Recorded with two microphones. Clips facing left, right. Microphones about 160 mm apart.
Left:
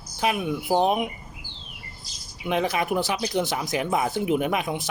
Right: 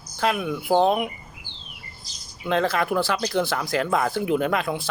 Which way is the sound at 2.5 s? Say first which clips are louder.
Right 2 dB; 15° left (ahead or behind).